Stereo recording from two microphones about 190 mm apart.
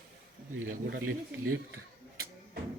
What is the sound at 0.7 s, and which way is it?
Speech, 50° right (ahead or behind).